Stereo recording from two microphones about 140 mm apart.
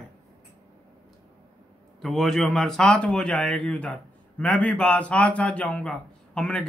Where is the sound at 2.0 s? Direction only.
Centre (ahead or behind).